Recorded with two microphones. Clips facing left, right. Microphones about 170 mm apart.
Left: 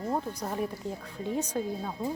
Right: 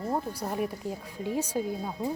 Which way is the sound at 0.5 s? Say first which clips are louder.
Right 2 dB; 10° right (ahead or behind).